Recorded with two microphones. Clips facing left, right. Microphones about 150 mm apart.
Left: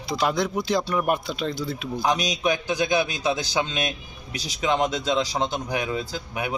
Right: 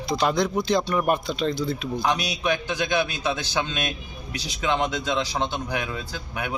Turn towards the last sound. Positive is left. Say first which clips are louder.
# left 2 dB
turn(degrees=15)  # may be behind; listen again after turning